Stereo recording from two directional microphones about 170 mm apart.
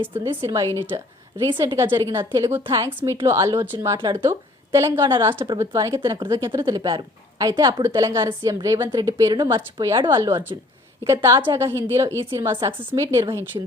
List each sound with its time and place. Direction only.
0.2 s a woman's voice: 20° right (ahead or behind)
3.9 s a woman's voice: 30° right (ahead or behind)
4.2 s a woman's voice: 15° right (ahead or behind)
6.2 s a woman's voice: 15° right (ahead or behind)
6.5 s a woman's voice: 25° right (ahead or behind)